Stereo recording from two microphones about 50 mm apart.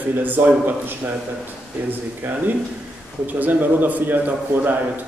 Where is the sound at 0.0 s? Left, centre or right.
Right.